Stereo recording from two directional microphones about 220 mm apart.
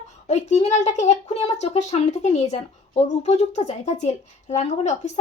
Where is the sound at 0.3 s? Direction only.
30° left (ahead or behind).